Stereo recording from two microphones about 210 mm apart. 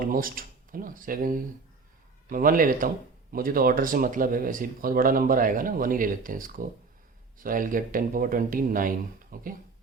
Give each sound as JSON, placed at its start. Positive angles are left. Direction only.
{"t": 0.0, "sound": "speech", "side_deg": -40}